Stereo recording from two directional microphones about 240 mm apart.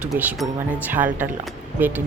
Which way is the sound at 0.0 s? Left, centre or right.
Centre.